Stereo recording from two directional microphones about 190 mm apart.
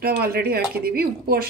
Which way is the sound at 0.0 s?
50° right (ahead or behind).